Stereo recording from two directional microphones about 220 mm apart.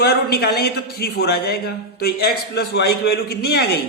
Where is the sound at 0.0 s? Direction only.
45° left (ahead or behind).